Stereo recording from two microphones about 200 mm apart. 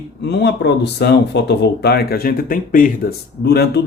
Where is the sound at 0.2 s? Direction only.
55° left (ahead or behind).